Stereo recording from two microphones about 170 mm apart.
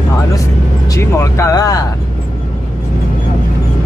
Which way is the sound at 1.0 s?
15° left (ahead or behind).